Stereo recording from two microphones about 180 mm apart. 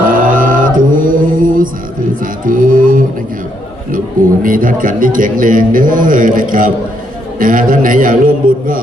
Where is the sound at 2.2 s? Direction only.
50° right (ahead or behind).